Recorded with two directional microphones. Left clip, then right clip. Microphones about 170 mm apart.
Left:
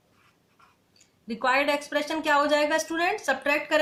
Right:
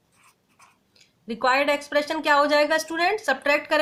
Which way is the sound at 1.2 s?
40° right (ahead or behind).